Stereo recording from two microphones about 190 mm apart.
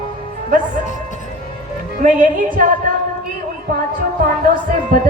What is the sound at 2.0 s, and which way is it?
Speech, 45° right (ahead or behind).